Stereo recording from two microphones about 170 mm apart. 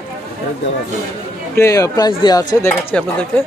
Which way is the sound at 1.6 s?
20° left (ahead or behind).